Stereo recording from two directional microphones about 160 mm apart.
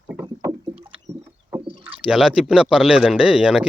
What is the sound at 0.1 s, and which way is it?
Rowboat, 15° right (ahead or behind).